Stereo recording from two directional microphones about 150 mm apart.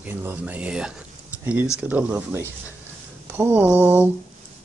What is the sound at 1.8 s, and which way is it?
Mantra, 10° right (ahead or behind).